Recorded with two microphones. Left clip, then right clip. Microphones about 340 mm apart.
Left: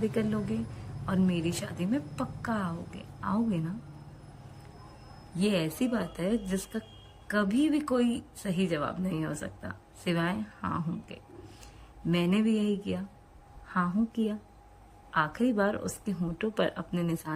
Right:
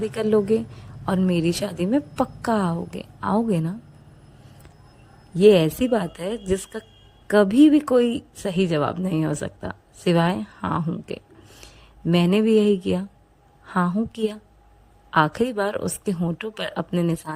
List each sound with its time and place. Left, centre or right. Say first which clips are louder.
0.0 s speech: right 10 dB; centre
5.4 s speech: right 15 dB; centre